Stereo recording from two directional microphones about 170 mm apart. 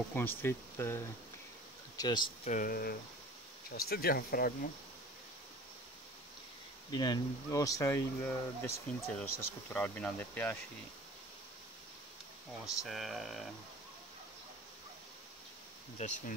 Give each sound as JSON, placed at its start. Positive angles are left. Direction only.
{"t": 0.1, "sound": "speech", "side_deg": 10}
{"t": 2.0, "sound": "speech", "side_deg": 25}
{"t": 2.4, "sound": "speech", "side_deg": 50}
{"t": 6.9, "sound": "speech", "side_deg": 25}
{"t": 12.6, "sound": "speech", "side_deg": 0}
{"t": 16.0, "sound": "speech", "side_deg": 40}